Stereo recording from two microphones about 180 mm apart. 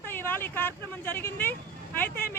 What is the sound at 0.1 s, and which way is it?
Speech, 10° left (ahead or behind).